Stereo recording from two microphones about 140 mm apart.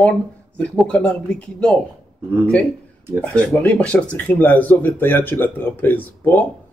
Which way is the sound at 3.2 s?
10° left (ahead or behind).